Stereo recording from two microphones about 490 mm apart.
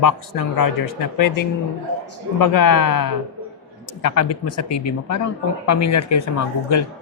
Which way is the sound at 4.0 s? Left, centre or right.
Left.